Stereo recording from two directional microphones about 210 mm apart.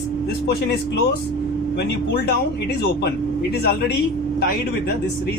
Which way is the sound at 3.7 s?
50° left (ahead or behind).